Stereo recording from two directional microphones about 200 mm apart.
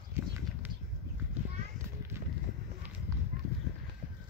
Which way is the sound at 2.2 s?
15° right (ahead or behind).